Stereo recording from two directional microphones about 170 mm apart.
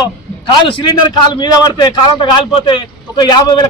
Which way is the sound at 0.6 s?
25° left (ahead or behind).